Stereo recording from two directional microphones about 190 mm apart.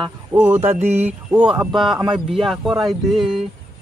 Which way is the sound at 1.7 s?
Centre (ahead or behind).